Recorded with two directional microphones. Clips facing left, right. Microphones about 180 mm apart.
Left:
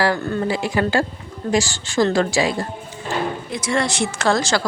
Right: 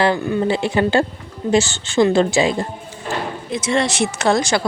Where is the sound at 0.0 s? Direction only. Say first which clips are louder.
Right 3 dB; 20° right (ahead or behind).